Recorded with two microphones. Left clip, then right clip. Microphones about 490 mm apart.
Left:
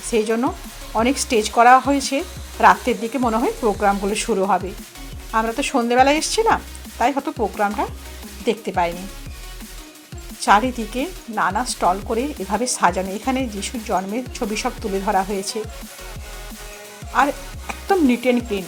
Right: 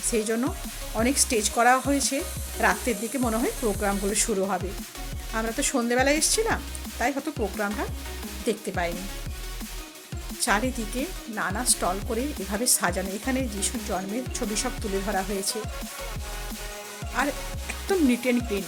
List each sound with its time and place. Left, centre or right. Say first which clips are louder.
0.1 s speech: left 7 dB; right
10.4 s speech: left 10 dB; right
17.8 s speech: left 7 dB; right